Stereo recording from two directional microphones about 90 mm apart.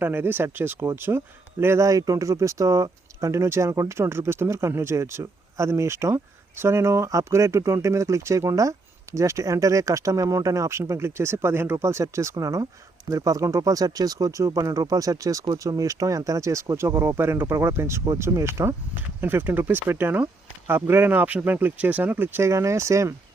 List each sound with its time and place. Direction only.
0.0 s speech: 25° right (ahead or behind)